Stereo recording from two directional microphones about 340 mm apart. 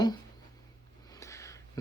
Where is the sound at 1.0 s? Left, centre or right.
Centre.